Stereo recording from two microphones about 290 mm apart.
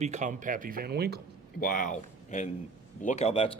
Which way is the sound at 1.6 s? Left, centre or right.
Left.